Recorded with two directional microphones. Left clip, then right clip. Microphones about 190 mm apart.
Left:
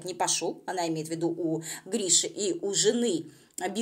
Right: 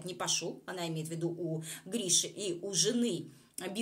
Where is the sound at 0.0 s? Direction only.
20° left (ahead or behind).